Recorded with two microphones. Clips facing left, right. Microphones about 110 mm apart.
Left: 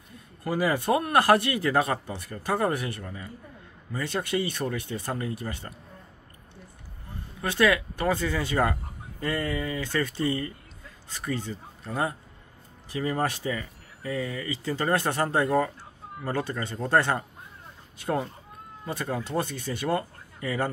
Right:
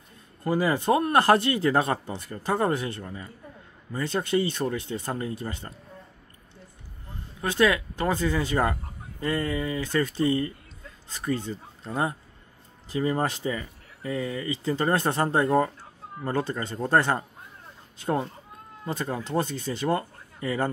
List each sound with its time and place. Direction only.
0.4 s speech: 25° right (ahead or behind)
7.5 s speech: 20° right (ahead or behind)
11.8 s speech: 25° right (ahead or behind)
18.9 s speech: 20° right (ahead or behind)